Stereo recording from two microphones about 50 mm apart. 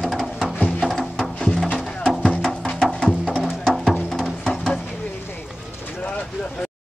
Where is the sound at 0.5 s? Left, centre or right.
Left.